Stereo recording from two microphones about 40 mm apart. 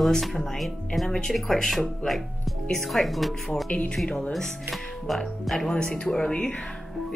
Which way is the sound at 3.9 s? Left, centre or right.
Centre.